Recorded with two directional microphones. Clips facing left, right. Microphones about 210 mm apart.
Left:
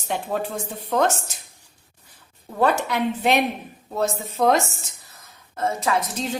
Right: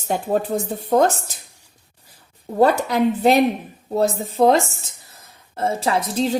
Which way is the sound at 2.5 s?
35° right (ahead or behind).